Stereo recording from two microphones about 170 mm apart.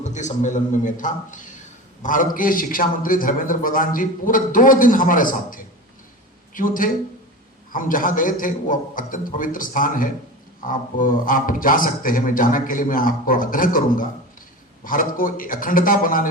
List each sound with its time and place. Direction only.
0.0 s a man's voice: 45° left (ahead or behind)